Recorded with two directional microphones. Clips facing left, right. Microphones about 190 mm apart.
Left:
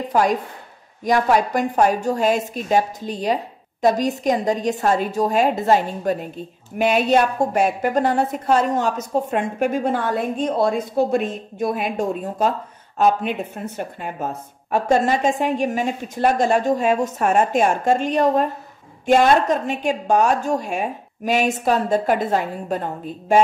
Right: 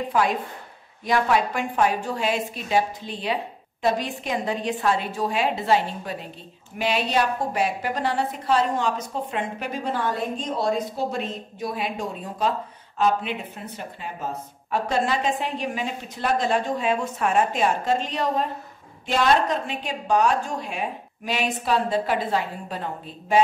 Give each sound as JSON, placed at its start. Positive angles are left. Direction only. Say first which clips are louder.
{"t": 0.1, "sound": "a woman's voice", "louder": "left 6 dB", "side_deg": 45}